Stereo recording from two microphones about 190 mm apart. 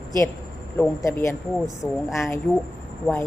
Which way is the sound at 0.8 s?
15° left (ahead or behind).